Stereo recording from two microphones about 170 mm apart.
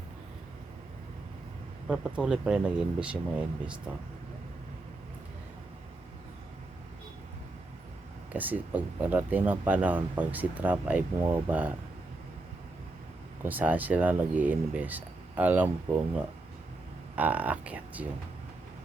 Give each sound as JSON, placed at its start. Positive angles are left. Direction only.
{"t": 1.9, "sound": "speech", "side_deg": -5}
{"t": 8.3, "sound": "speech", "side_deg": -10}
{"t": 13.4, "sound": "speech", "side_deg": -10}
{"t": 17.2, "sound": "speech", "side_deg": -10}